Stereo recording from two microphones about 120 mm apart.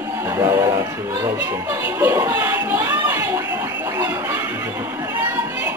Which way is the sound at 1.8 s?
20° right (ahead or behind).